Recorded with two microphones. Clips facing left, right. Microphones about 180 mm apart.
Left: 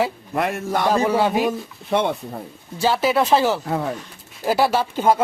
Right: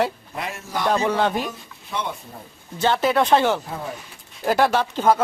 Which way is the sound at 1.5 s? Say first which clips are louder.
Left 11 dB; 65° left (ahead or behind).